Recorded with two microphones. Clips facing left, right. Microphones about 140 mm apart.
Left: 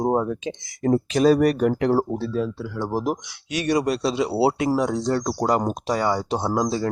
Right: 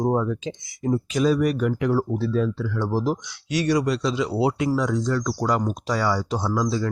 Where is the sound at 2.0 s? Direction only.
20° left (ahead or behind); by 5.5 s 35° left (ahead or behind).